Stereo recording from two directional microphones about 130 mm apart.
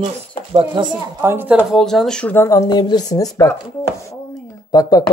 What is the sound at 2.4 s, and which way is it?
A woman's voice, 30° left (ahead or behind).